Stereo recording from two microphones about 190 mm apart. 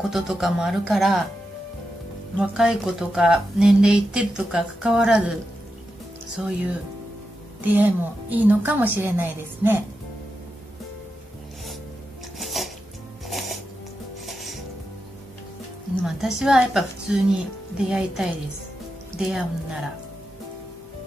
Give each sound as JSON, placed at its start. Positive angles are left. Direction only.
{"t": 0.1, "sound": "speech", "side_deg": 0}
{"t": 2.3, "sound": "speech", "side_deg": -5}
{"t": 6.4, "sound": "speech", "side_deg": -5}
{"t": 7.6, "sound": "a woman's voice", "side_deg": -10}
{"t": 12.4, "sound": "music", "side_deg": 0}
{"t": 16.0, "sound": "speech", "side_deg": 0}